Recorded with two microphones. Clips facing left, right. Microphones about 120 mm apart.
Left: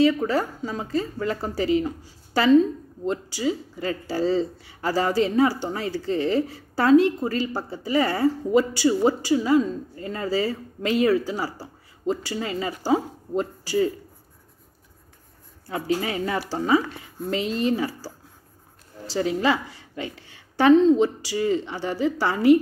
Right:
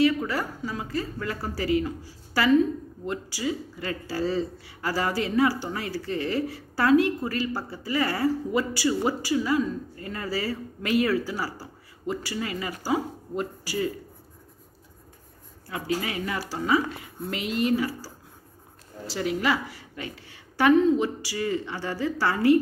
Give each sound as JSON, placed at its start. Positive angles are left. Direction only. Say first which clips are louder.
{"t": 0.0, "sound": "a woman's voice", "louder": "left 3 dB", "side_deg": 25}
{"t": 15.7, "sound": "a woman's voice", "louder": "left 4 dB", "side_deg": 30}